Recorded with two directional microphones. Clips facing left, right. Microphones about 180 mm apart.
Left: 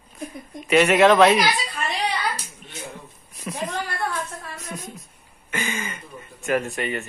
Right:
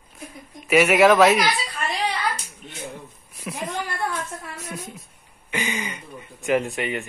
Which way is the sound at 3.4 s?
10° right (ahead or behind).